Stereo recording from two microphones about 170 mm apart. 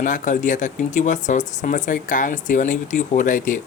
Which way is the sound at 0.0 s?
50° left (ahead or behind).